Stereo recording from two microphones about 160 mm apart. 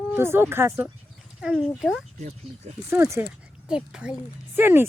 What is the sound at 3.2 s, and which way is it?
Speech, 5° right (ahead or behind).